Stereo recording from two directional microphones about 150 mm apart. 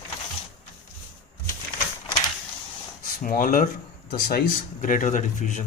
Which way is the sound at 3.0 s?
65° left (ahead or behind).